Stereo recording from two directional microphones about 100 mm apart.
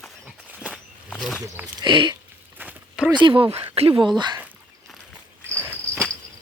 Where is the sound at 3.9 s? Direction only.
50° right (ahead or behind).